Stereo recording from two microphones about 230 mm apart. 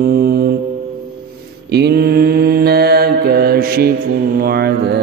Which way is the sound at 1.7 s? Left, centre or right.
Right.